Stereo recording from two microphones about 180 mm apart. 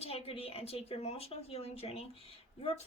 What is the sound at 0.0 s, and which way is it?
Speech, 35° left (ahead or behind).